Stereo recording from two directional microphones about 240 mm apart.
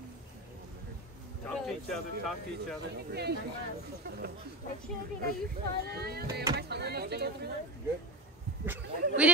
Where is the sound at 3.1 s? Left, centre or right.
Right.